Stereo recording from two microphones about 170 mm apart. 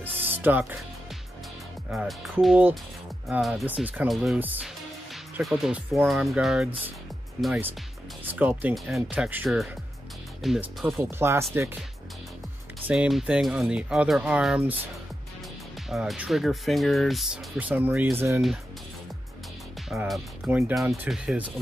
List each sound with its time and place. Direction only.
0.0 s music: 10° right (ahead or behind)
1.9 s speech: centre (ahead or behind)
5.1 s music: centre (ahead or behind)
6.0 s speech: centre (ahead or behind)
8.3 s speech: 10° right (ahead or behind)
11.0 s speech: 15° right (ahead or behind)
12.8 s speech: 5° right (ahead or behind)
15.9 s speech: 5° right (ahead or behind)
19.9 s speech: 5° right (ahead or behind)